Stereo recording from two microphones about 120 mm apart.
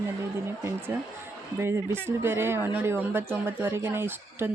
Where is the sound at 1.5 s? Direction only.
20° right (ahead or behind).